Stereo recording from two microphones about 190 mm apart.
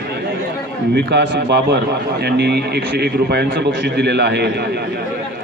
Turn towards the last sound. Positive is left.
turn(degrees=-60)  # may be behind; listen again after turning